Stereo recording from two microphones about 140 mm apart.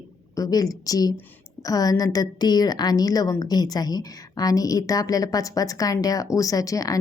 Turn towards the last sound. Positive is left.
turn(degrees=25)  # may be behind; listen again after turning